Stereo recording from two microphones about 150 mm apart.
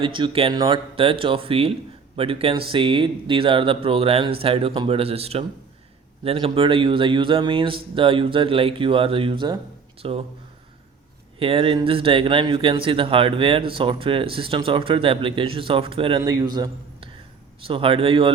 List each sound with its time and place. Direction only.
0.0 s speech: 35° right (ahead or behind)
11.3 s speech: 40° right (ahead or behind)
16.2 s a man's voice: 25° right (ahead or behind)
17.6 s speech: 35° right (ahead or behind)